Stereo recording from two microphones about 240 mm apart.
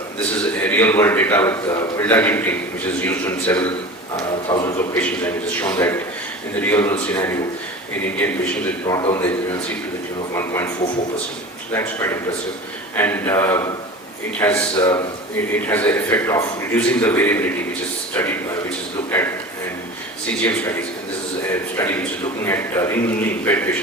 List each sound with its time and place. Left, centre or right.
0.6 s a man's voice: centre
4.2 s a man's voice: centre
4.9 s a man's voice: centre
8.9 s a man's voice: centre
10.3 s a man's voice: centre
11.7 s a man's voice: centre
14.8 s speech: centre
15.5 s a man's voice: centre
20.4 s a man's voice: centre